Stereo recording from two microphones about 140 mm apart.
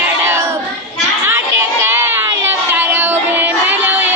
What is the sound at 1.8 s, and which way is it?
Music, 15° right (ahead or behind).